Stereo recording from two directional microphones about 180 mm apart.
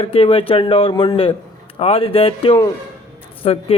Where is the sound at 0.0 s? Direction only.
30° left (ahead or behind).